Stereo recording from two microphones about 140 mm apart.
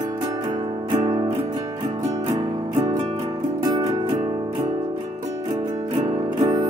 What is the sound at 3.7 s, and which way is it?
Music, 30° right (ahead or behind).